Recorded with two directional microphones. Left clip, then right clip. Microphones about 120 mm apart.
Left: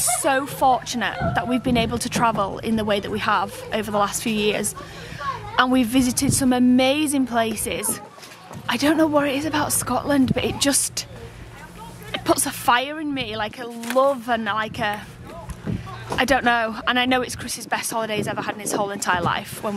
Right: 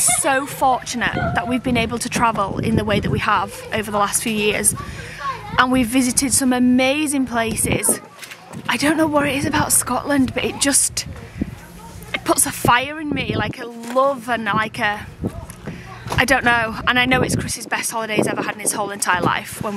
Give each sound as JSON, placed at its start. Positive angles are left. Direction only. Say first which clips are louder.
{"t": 0.2, "sound": "speech", "louder": "right 1 dB", "side_deg": -5}
{"t": 12.1, "sound": "speech", "louder": "right 2 dB", "side_deg": -5}
{"t": 16.2, "sound": "speech", "louder": "right 3 dB", "side_deg": -5}